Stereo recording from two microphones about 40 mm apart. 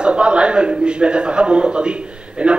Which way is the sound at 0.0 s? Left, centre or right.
Right.